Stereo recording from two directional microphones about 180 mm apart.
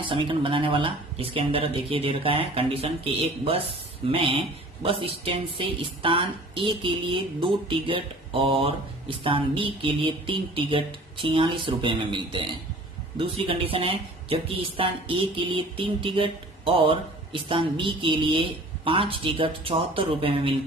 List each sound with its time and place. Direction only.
0.0 s a woman's voice: 25° right (ahead or behind)